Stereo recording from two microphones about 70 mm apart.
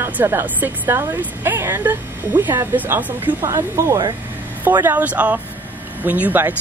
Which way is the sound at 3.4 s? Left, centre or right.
Right.